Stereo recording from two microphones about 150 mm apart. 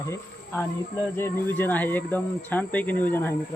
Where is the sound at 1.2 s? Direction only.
15° left (ahead or behind).